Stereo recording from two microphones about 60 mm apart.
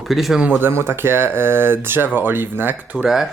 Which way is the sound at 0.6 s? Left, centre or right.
Right.